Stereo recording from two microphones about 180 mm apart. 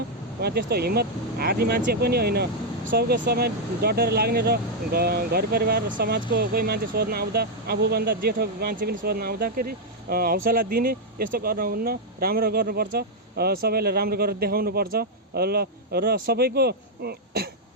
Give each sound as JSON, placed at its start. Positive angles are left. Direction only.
{"t": 0.4, "sound": "speech", "side_deg": -60}